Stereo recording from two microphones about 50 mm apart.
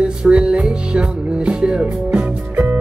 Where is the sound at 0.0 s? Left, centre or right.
Centre.